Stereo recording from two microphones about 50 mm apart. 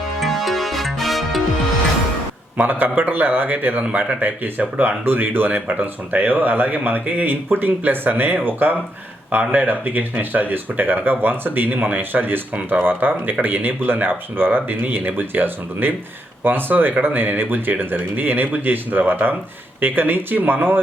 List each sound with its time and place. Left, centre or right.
0.2 s music: centre
2.6 s speech: right
9.5 s speech: right